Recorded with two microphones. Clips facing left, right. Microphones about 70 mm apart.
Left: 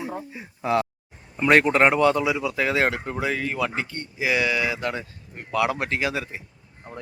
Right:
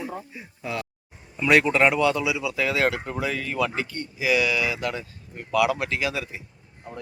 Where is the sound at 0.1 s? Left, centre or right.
Left.